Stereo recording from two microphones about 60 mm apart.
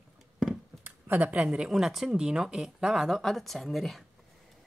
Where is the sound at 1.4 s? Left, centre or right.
Centre.